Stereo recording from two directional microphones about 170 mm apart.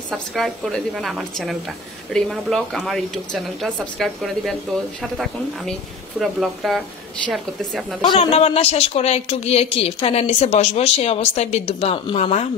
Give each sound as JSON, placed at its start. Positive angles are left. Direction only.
{"t": 0.1, "sound": "speech", "side_deg": 0}
{"t": 8.2, "sound": "speech", "side_deg": 40}